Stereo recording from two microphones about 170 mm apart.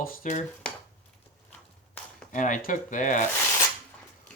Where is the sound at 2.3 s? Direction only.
50° left (ahead or behind).